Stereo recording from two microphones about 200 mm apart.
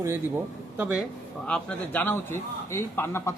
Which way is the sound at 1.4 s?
5° left (ahead or behind).